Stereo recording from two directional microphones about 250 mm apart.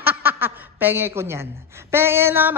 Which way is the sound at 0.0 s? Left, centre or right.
Centre.